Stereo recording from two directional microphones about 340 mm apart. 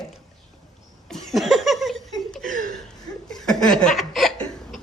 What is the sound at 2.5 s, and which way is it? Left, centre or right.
Chuckle, right.